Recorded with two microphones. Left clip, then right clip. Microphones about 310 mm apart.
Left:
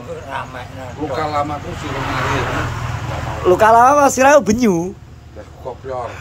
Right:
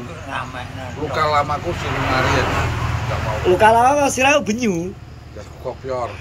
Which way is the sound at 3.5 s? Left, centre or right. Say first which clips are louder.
Left 3 dB; centre.